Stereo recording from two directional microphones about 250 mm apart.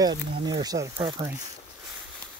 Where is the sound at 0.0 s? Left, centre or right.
Centre.